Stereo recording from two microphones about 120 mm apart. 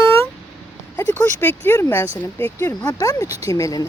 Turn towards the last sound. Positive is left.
turn(degrees=25)  # may be behind; listen again after turning